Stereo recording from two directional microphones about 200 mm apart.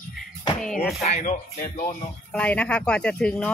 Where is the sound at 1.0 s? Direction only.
35° left (ahead or behind).